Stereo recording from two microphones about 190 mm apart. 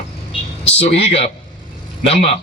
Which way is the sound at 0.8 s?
35° left (ahead or behind).